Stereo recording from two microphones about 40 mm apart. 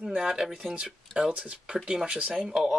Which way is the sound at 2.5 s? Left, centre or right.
Centre.